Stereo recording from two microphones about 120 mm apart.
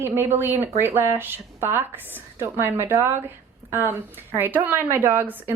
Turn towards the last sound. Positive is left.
turn(degrees=-15)  # may be behind; listen again after turning